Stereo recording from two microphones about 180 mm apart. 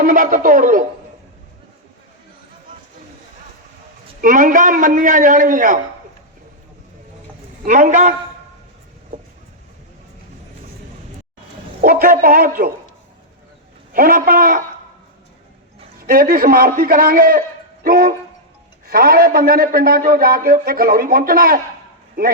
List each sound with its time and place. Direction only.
0.0 s a man's voice: 50° right (ahead or behind)
4.2 s a man's voice: 50° right (ahead or behind)
7.6 s a man's voice: 45° right (ahead or behind)
11.8 s a man's voice: 55° right (ahead or behind)
13.9 s a man's voice: 55° right (ahead or behind)
16.0 s a man's voice: 55° right (ahead or behind)